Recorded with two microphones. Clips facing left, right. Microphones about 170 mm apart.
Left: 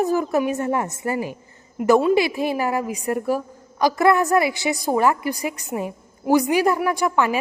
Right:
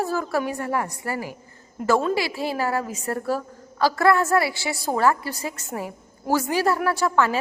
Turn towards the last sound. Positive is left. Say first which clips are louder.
# left 1 dB
turn(degrees=15)  # may be behind; listen again after turning